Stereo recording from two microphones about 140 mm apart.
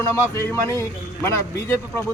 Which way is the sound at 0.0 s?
20° left (ahead or behind).